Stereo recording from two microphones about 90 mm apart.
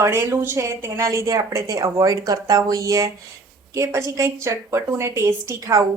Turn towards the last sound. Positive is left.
turn(degrees=-35)  # may be behind; listen again after turning